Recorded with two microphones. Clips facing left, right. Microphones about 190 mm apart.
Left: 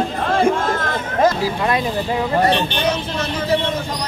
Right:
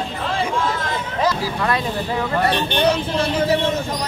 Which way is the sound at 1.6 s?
15° left (ahead or behind).